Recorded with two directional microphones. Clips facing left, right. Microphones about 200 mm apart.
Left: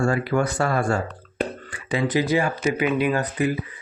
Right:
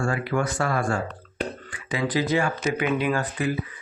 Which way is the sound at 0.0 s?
40° left (ahead or behind).